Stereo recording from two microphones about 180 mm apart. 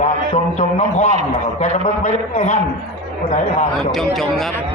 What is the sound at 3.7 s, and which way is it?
Speech, centre (ahead or behind).